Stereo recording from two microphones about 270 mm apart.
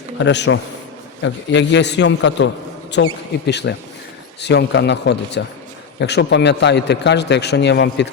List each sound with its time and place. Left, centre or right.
0.2 s a man's voice: left